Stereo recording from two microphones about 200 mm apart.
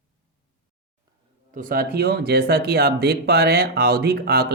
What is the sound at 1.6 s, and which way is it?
Speech, 45° right (ahead or behind).